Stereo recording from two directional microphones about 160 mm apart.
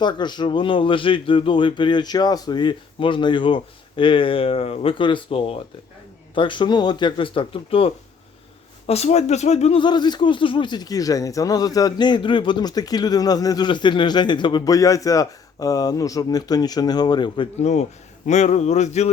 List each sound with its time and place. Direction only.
0.0 s a man's voice: 30° left (ahead or behind); by 9.8 s 45° left (ahead or behind)
9.8 s a man's voice: 30° left (ahead or behind)
17.6 s speech: 45° left (ahead or behind)